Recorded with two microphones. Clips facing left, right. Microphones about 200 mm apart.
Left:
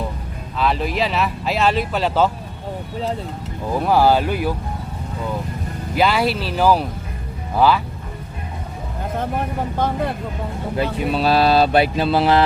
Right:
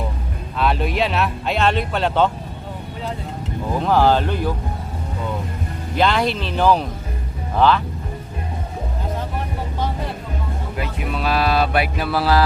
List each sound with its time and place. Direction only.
0.6 s speech: centre (ahead or behind)
3.8 s speech: 10° left (ahead or behind)
6.0 s speech: 5° left (ahead or behind)
10.8 s mantra: 30° left (ahead or behind)